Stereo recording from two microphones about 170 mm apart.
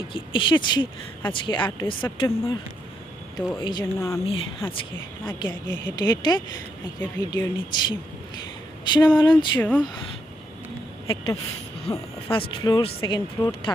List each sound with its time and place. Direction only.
0.1 s speech: 30° left (ahead or behind)
3.6 s speech: 25° left (ahead or behind)
4.3 s speech: 30° left (ahead or behind)
9.6 s speech: 5° left (ahead or behind)
11.0 s speech: 15° left (ahead or behind)
11.9 s speech: 30° left (ahead or behind)